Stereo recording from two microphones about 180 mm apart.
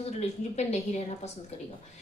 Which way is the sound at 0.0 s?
35° left (ahead or behind).